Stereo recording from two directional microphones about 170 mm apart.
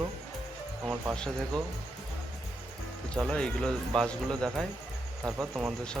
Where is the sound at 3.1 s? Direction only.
5° left (ahead or behind).